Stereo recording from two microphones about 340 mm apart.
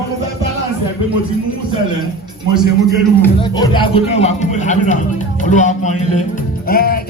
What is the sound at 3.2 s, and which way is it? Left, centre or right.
Speech, centre.